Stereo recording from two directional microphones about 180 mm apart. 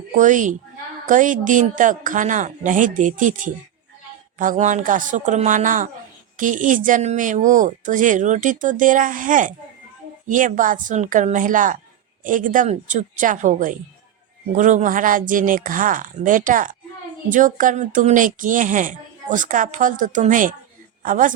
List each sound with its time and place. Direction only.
0.2 s speech: 45° right (ahead or behind)